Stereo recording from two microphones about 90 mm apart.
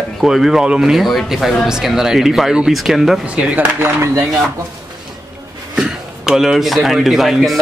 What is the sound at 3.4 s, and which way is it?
Speech, 20° right (ahead or behind).